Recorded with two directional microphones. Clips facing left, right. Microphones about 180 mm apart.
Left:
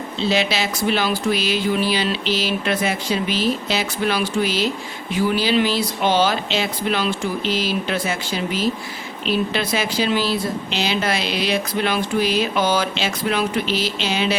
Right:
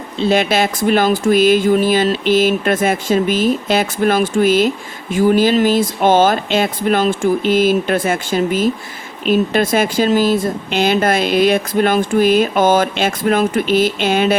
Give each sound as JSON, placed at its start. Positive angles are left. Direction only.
{"t": 0.2, "sound": "speech", "side_deg": -50}